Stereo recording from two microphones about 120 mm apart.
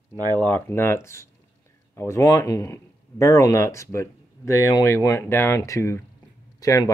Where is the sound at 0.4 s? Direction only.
15° left (ahead or behind).